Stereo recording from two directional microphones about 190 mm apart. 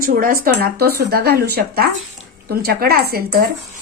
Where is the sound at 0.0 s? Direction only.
50° right (ahead or behind).